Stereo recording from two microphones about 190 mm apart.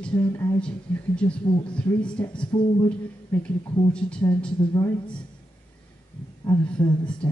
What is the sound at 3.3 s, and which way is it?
Speech, 10° left (ahead or behind).